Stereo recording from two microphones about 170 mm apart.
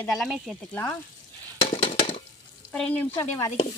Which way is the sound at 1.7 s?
35° left (ahead or behind).